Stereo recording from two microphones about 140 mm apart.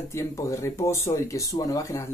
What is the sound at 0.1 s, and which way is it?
Speech, 20° left (ahead or behind).